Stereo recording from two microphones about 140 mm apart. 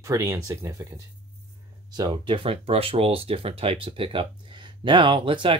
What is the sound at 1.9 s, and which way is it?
Speech, 35° right (ahead or behind).